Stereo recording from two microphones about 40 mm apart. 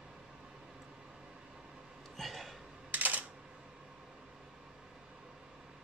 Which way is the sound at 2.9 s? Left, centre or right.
Right.